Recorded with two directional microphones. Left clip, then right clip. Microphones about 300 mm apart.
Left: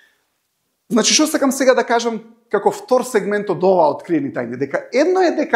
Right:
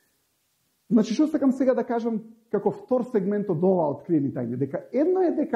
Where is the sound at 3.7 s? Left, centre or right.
Centre.